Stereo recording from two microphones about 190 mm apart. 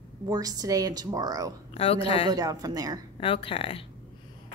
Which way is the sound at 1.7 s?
30° left (ahead or behind).